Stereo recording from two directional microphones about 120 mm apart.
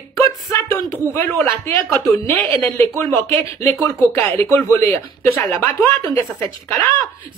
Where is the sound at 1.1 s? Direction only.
20° left (ahead or behind).